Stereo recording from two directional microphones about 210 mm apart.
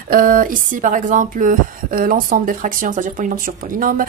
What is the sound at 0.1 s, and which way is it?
Speech, 40° right (ahead or behind).